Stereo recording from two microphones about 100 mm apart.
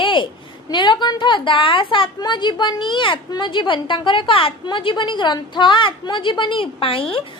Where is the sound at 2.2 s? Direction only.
50° left (ahead or behind).